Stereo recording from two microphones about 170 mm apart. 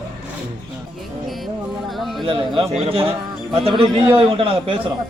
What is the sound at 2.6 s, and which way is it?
A man's voice, 35° right (ahead or behind).